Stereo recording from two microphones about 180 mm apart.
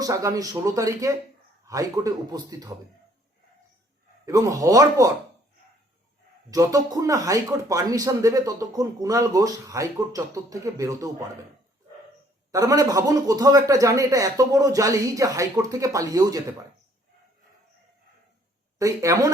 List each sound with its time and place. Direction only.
0.0 s speech: 20° right (ahead or behind)
4.3 s speech: 20° right (ahead or behind)
6.5 s speech: 20° right (ahead or behind)
12.5 s speech: 20° right (ahead or behind)
18.8 s speech: 20° right (ahead or behind)